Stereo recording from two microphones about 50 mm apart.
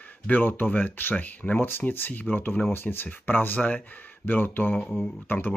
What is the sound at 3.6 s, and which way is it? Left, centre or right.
Speech, left.